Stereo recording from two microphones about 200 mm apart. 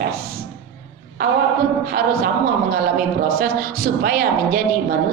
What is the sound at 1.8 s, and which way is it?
A woman's voice, 50° right (ahead or behind).